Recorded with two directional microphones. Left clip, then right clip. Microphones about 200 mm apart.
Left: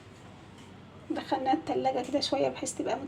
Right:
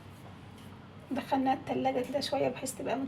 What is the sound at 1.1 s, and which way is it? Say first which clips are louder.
A woman's voice: left 1 dB; 20° left (ahead or behind).